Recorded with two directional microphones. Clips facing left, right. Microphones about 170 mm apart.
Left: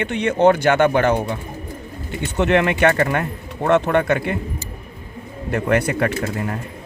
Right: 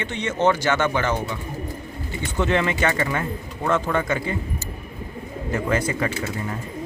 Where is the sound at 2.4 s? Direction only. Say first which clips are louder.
Left 5 dB; 65° left (ahead or behind).